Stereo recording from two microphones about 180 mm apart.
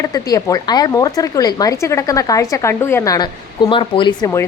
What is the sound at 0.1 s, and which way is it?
A woman's voice, 20° left (ahead or behind).